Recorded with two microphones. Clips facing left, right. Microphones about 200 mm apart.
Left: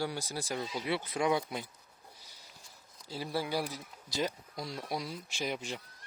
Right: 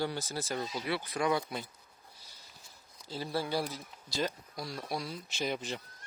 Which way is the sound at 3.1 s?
10° left (ahead or behind).